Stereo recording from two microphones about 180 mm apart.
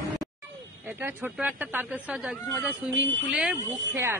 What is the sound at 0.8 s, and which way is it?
Speech, 10° right (ahead or behind).